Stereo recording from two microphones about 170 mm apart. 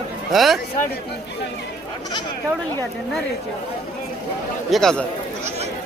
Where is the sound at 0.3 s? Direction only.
Centre (ahead or behind).